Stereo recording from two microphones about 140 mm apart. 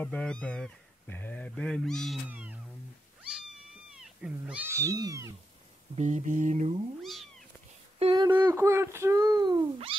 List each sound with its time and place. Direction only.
0.0 s speech: 5° left (ahead or behind)
2.2 s cat: 10° right (ahead or behind)
3.9 s speech: 5° right (ahead or behind); by 5.3 s 25° right (ahead or behind)
5.9 s mantra: 60° right (ahead or behind)
7.0 s cat: centre (ahead or behind)
8.0 s a sound: 35° right (ahead or behind)
8.3 s speech: 15° right (ahead or behind)